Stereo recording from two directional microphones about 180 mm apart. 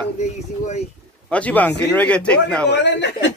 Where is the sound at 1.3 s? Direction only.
10° left (ahead or behind).